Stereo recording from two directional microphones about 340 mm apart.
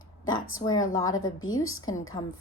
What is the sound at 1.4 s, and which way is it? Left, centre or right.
Speech, left.